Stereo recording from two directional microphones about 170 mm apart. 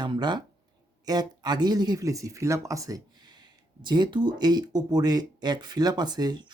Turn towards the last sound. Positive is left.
turn(degrees=-25)  # may be behind; listen again after turning